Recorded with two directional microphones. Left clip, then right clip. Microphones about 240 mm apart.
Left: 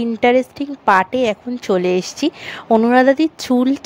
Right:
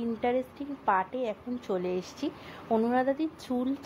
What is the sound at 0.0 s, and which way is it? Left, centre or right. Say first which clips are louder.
A woman's voice: left 15 dB; left.